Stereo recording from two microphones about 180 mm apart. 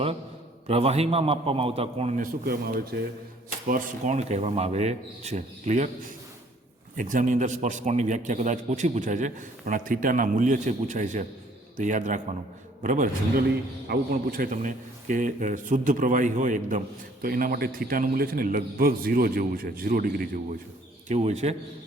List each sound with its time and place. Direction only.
0.7 s speech: 35° right (ahead or behind)
2.1 s speech: 55° right (ahead or behind)
3.7 s speech: 45° right (ahead or behind)
6.9 s a man's voice: 45° right (ahead or behind)
21.1 s speech: 40° right (ahead or behind)